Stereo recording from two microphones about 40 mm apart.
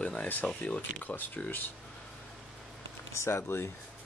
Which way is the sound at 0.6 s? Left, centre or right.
Left.